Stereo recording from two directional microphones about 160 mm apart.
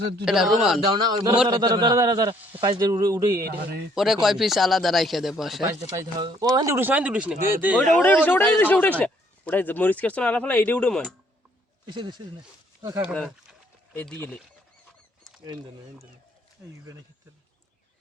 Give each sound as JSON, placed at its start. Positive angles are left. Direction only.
{"t": 0.3, "sound": "speech", "side_deg": -5}
{"t": 0.9, "sound": "speech", "side_deg": -25}
{"t": 3.4, "sound": "speech", "side_deg": -70}
{"t": 3.9, "sound": "speech", "side_deg": 0}
{"t": 5.6, "sound": "speech", "side_deg": -20}
{"t": 7.9, "sound": "speech", "side_deg": 10}
{"t": 11.9, "sound": "speech", "side_deg": -30}
{"t": 13.9, "sound": "speech", "side_deg": 10}
{"t": 15.2, "sound": "rodents", "side_deg": -30}
{"t": 16.6, "sound": "speech", "side_deg": -15}